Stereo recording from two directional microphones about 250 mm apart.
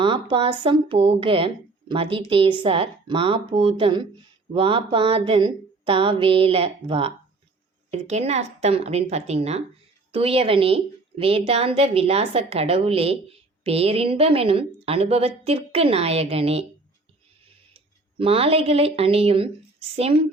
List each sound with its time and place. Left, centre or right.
0.0 s a woman's voice: centre
17.7 s speech: right